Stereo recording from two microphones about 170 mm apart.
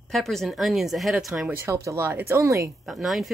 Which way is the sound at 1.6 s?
15° right (ahead or behind).